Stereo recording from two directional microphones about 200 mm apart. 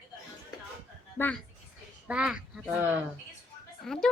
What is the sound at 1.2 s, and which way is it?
Speech, 10° left (ahead or behind).